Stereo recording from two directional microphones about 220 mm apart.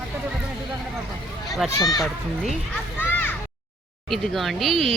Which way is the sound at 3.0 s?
10° left (ahead or behind).